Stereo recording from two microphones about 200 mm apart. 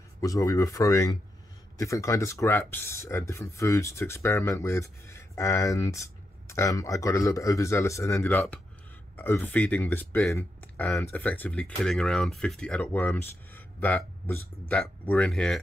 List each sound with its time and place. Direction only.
0.2 s speech: 15° left (ahead or behind)